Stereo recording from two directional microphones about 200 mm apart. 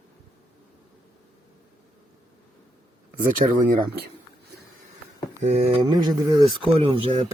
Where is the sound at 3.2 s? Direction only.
45° right (ahead or behind).